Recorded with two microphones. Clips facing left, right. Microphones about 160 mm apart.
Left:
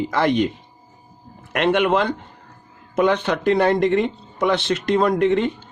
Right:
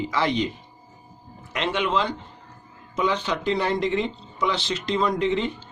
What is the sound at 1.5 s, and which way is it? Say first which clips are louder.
Speech: left 7 dB; 60° left (ahead or behind).